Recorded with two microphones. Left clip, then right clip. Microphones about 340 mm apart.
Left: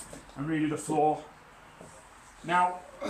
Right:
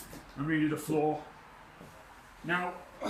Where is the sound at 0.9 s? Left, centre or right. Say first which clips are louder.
Left 5 dB; left.